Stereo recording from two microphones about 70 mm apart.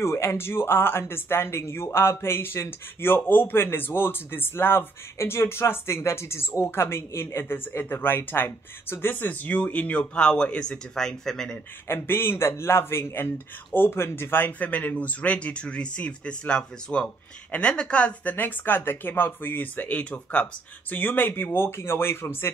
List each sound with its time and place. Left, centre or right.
0.0 s speech: left; by 11.6 s centre
11.9 s speech: left; by 18.3 s centre
18.3 s speech: left